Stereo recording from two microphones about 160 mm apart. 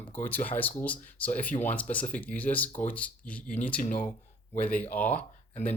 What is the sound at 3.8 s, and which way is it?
Speech, 55° left (ahead or behind).